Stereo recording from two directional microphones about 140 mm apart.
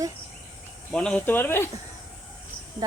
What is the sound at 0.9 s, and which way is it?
Speech, 5° left (ahead or behind).